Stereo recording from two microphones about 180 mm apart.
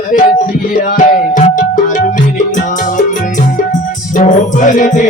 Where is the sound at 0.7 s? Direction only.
50° left (ahead or behind).